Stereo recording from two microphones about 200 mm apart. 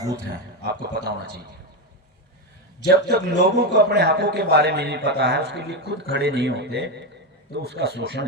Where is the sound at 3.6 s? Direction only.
55° right (ahead or behind).